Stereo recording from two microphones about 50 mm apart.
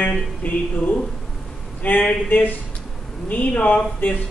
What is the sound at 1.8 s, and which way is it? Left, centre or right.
Speech, left.